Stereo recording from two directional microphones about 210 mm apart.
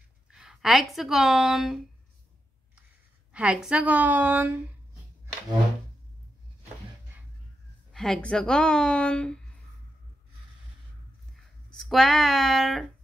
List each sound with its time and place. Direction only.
0.3 s a woman's voice: centre (ahead or behind)
3.3 s a woman's voice: 5° right (ahead or behind)
7.9 s speech: centre (ahead or behind)
11.3 s speech: centre (ahead or behind)